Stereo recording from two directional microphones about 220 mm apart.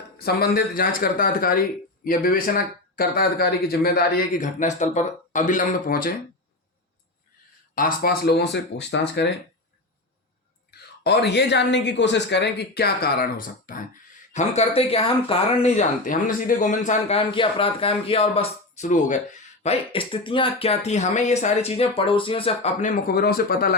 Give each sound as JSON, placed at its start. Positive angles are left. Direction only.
{"t": 0.2, "sound": "speech", "side_deg": 45}
{"t": 7.8, "sound": "speech", "side_deg": 40}
{"t": 11.0, "sound": "speech", "side_deg": 50}